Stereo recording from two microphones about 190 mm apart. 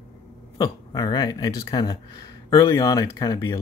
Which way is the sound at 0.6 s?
20° left (ahead or behind).